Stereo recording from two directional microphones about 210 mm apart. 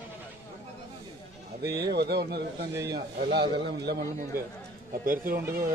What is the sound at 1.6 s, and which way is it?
A man's voice, 50° right (ahead or behind).